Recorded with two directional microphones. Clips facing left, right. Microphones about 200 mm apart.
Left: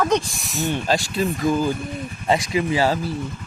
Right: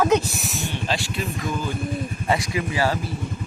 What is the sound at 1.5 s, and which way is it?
Speech, 30° left (ahead or behind).